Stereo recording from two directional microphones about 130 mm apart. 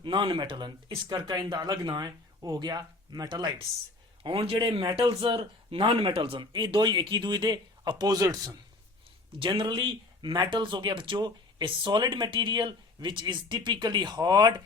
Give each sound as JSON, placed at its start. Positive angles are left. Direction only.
{"t": 0.0, "sound": "speech", "side_deg": -40}
{"t": 4.2, "sound": "speech", "side_deg": -45}
{"t": 9.4, "sound": "speech", "side_deg": -40}